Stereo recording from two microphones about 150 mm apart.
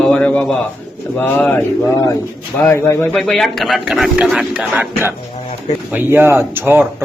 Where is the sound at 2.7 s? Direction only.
15° left (ahead or behind).